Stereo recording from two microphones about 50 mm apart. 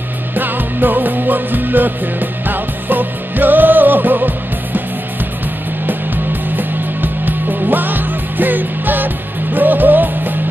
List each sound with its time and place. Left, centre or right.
0.4 s music: right
6.5 s music: right